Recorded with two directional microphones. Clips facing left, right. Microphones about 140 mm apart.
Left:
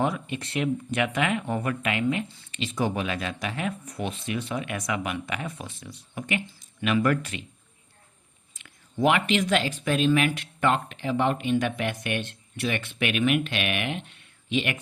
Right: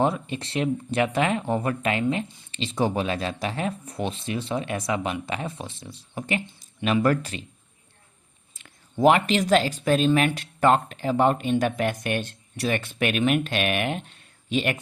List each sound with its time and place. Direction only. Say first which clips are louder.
0.0 s speech: right 3 dB; 30° right (ahead or behind)
8.5 s speech: right 2 dB; 35° right (ahead or behind)